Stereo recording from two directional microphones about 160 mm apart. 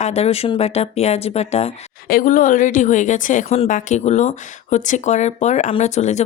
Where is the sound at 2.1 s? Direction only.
60° left (ahead or behind).